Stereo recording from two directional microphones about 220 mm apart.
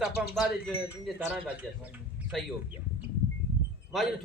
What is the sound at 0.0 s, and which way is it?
A man's voice, 5° right (ahead or behind).